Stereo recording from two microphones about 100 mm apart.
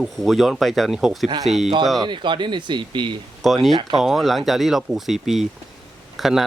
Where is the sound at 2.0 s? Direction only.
55° right (ahead or behind).